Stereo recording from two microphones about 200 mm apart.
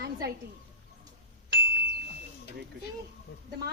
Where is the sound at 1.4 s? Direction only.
50° right (ahead or behind).